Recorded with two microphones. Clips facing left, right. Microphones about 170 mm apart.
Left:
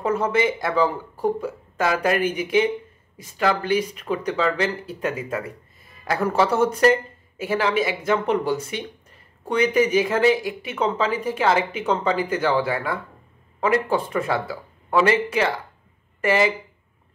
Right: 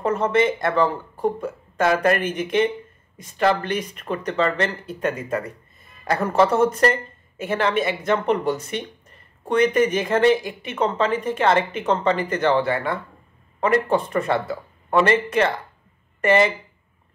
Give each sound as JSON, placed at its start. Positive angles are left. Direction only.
{"t": 0.0, "sound": "speech", "side_deg": 5}